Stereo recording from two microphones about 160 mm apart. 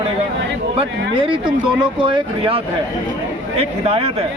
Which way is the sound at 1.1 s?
30° right (ahead or behind).